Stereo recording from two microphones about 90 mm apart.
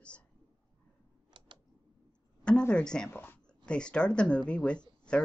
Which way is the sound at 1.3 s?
60° right (ahead or behind).